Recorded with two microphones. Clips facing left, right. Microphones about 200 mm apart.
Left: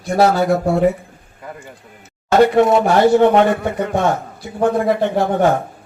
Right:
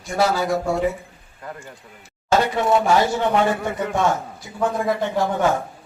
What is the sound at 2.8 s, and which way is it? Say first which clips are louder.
Speech: left 7 dB; 60° left (ahead or behind).